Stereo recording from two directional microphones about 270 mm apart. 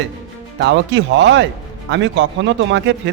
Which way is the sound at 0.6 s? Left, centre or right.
Right.